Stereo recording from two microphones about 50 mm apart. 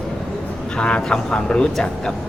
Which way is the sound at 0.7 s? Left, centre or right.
Centre.